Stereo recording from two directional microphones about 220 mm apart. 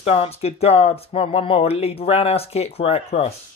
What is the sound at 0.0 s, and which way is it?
Speech, 25° left (ahead or behind).